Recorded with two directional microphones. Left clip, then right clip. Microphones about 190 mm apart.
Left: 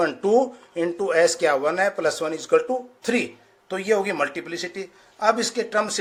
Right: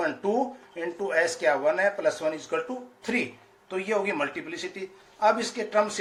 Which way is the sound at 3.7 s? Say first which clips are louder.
Left 5 dB; 60° left (ahead or behind).